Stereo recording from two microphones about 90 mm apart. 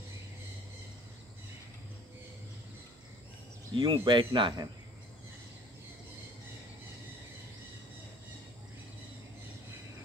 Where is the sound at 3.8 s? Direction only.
65° right (ahead or behind).